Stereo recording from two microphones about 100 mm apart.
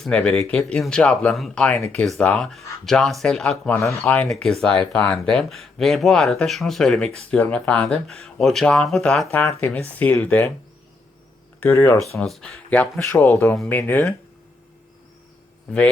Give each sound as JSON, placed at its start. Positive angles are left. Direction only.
{"t": 0.0, "sound": "speech", "side_deg": 10}
{"t": 3.7, "sound": "speech", "side_deg": 20}
{"t": 4.3, "sound": "speech", "side_deg": 5}
{"t": 11.6, "sound": "speech", "side_deg": 25}
{"t": 12.2, "sound": "speech", "side_deg": 5}
{"t": 13.0, "sound": "speech", "side_deg": 25}